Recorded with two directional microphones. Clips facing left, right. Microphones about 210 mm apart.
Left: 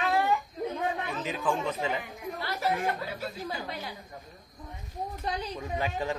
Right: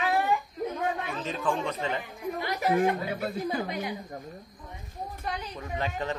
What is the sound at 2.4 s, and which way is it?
Speech, 15° right (ahead or behind).